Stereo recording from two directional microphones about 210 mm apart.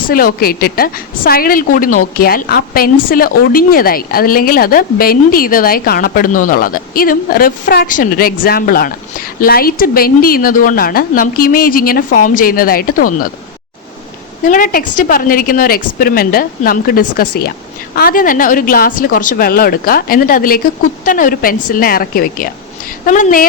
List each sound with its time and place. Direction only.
0.1 s a woman's voice: 45° left (ahead or behind)
14.4 s a woman's voice: 40° left (ahead or behind)